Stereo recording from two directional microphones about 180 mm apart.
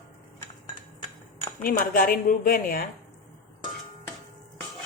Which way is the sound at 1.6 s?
55° left (ahead or behind).